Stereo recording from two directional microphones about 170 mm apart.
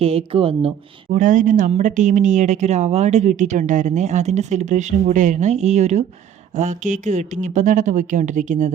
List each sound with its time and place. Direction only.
0.0 s speech: 35° right (ahead or behind)
1.1 s speech: 50° right (ahead or behind)